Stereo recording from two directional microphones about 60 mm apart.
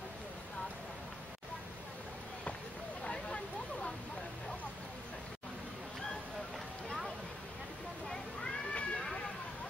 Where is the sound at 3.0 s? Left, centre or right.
Centre.